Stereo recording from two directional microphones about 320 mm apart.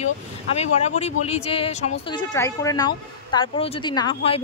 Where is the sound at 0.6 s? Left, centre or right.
Centre.